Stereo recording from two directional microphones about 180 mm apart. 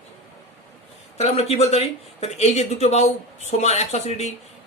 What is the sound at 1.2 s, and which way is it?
Speech, 35° left (ahead or behind).